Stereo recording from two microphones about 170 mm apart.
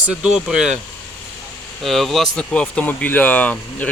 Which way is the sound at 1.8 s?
Centre (ahead or behind).